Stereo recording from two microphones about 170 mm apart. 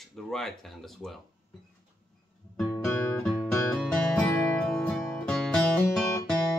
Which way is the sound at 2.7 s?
10° left (ahead or behind).